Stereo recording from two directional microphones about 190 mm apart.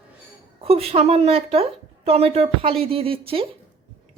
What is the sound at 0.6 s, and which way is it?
A woman's voice, 30° right (ahead or behind).